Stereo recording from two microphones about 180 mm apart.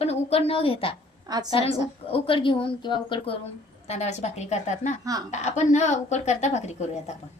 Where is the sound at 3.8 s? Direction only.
40° left (ahead or behind).